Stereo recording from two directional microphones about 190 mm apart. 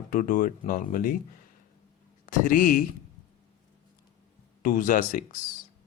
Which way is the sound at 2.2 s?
45° left (ahead or behind).